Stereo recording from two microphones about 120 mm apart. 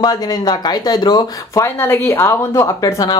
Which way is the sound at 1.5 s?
20° left (ahead or behind).